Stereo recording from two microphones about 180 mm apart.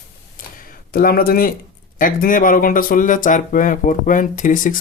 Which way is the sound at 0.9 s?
55° left (ahead or behind).